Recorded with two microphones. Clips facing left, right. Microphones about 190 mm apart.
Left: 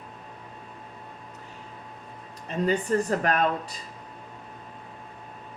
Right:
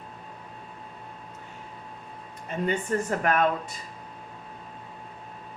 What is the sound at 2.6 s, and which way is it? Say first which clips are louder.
Speech: left 3 dB; 35° left (ahead or behind).